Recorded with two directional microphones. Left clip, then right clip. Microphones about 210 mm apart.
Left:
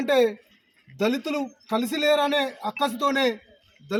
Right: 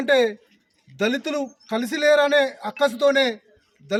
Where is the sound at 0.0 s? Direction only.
10° right (ahead or behind).